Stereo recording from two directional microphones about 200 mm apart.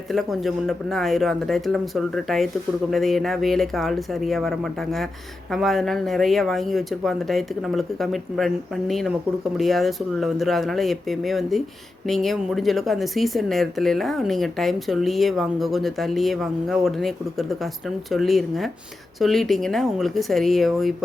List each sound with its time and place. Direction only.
0.1 s speech: centre (ahead or behind)